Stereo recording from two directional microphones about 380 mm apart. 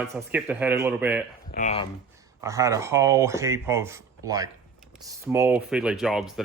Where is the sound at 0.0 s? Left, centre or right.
Centre.